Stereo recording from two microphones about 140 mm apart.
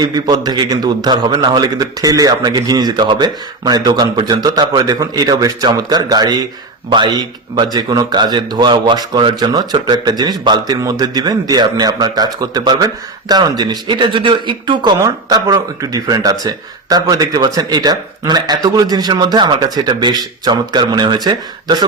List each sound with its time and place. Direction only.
0.0 s a man's voice: 30° right (ahead or behind)